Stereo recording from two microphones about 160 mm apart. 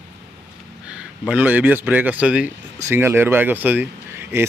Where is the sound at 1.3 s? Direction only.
10° right (ahead or behind).